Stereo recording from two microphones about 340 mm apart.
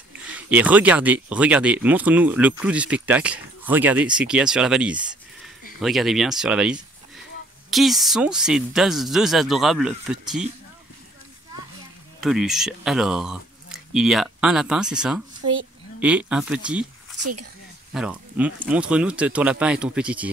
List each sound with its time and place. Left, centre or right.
0.2 s speech: centre
12.2 s speech: centre
17.2 s speech: right
17.9 s speech: centre